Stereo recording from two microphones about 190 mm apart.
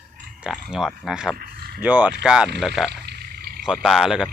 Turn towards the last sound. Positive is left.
turn(degrees=0)  # may be behind; listen again after turning